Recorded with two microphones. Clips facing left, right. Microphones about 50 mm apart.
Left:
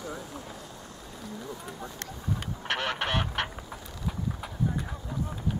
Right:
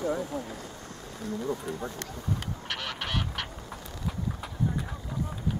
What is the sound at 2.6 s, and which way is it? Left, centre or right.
Goose, left.